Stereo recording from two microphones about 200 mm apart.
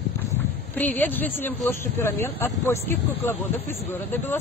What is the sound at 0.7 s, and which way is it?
Speech, 10° left (ahead or behind).